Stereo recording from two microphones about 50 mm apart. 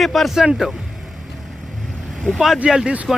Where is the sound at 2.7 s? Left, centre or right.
Centre.